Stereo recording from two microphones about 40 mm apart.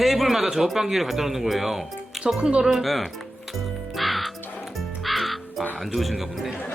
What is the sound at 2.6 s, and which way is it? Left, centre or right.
Speech, centre.